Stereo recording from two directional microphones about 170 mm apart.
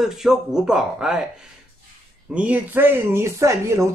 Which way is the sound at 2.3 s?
10° right (ahead or behind).